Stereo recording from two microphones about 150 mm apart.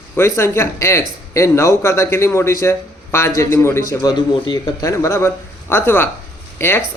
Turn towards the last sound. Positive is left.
turn(degrees=15)  # may be behind; listen again after turning